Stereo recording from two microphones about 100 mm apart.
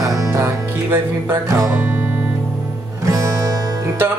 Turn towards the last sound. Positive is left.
turn(degrees=-35)  # may be behind; listen again after turning